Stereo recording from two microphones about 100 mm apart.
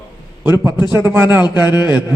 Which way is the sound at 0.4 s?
25° right (ahead or behind).